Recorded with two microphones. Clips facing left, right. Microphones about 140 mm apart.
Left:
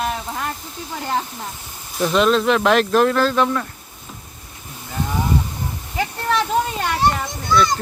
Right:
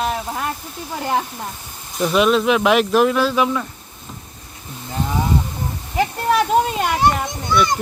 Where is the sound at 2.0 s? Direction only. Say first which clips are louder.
Right 1 dB; 5° right (ahead or behind).